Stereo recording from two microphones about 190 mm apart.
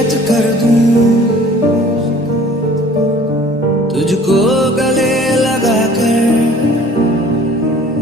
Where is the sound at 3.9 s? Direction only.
Centre (ahead or behind).